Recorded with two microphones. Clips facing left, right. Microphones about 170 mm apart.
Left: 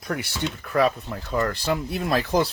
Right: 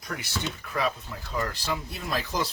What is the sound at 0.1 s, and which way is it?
Speech, 55° left (ahead or behind).